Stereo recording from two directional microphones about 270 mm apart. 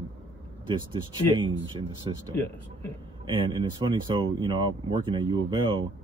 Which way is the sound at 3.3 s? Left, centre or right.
Centre.